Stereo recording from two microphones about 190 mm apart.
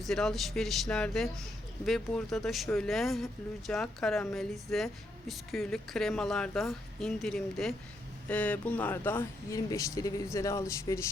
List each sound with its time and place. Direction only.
0.0 s speech: centre (ahead or behind)